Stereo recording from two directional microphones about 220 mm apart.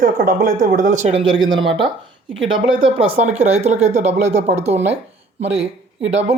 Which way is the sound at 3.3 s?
30° right (ahead or behind).